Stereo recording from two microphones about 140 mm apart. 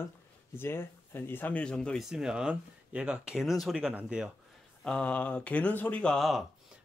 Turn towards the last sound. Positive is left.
turn(degrees=0)  # may be behind; listen again after turning